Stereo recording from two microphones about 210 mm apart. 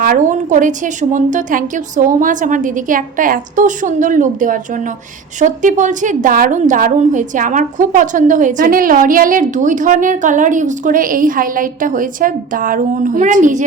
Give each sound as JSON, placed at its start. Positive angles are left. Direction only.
{"t": 0.0, "sound": "a woman's voice", "side_deg": -40}